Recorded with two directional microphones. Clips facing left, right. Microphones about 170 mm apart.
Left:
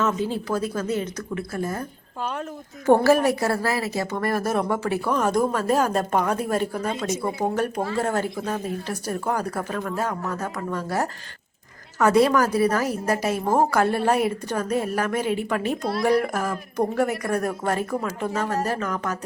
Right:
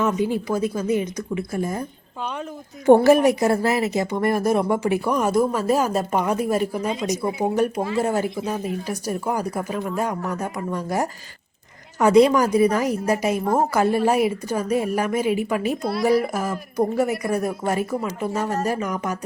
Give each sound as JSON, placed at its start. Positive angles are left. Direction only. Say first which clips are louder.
{"t": 0.0, "sound": "speech", "louder": "right 3 dB", "side_deg": -15}
{"t": 2.8, "sound": "speech", "louder": "right 4 dB", "side_deg": -15}